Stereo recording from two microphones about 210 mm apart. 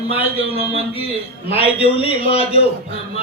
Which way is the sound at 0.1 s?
25° left (ahead or behind).